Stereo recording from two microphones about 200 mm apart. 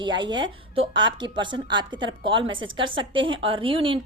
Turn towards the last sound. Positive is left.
turn(degrees=-25)  # may be behind; listen again after turning